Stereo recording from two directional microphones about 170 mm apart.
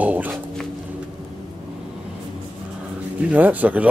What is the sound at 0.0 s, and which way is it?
Dog, 10° right (ahead or behind).